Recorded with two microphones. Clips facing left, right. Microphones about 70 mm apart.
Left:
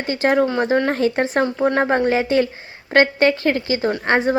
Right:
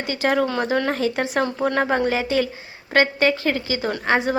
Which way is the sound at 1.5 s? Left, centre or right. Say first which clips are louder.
Left 3 dB; left.